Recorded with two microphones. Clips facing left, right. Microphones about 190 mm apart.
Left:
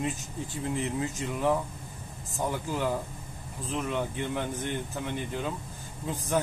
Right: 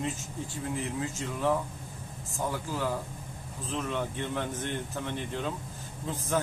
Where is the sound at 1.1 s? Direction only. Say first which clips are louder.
Even; 15° left (ahead or behind).